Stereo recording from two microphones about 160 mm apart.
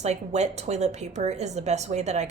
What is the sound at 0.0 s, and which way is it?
A woman's voice, 45° right (ahead or behind).